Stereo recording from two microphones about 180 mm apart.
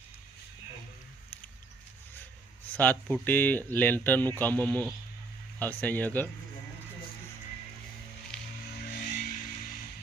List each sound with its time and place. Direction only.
2.7 s speech: 10° left (ahead or behind)
8.3 s music: 5° left (ahead or behind)
8.9 s a sound: 45° left (ahead or behind)